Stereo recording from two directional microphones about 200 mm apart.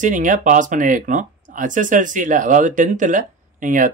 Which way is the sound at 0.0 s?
40° right (ahead or behind).